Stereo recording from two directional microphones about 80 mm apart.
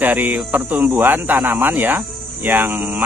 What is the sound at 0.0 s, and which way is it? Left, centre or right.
Speech, right.